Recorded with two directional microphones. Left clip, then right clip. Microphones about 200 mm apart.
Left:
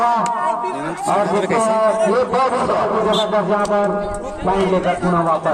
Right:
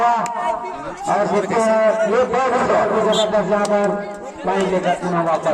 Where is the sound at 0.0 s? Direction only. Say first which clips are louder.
Even; 40° left (ahead or behind).